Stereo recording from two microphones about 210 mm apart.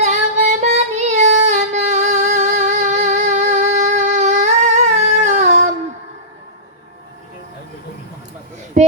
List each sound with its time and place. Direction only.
0.0 s child singing: 35° right (ahead or behind)